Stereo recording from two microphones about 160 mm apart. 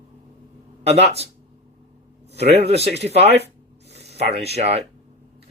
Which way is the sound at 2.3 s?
90° right.